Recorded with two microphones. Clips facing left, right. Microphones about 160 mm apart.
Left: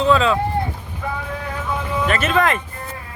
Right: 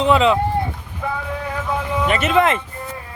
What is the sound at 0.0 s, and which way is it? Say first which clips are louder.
Speech: right 1 dB; 20° right (ahead or behind).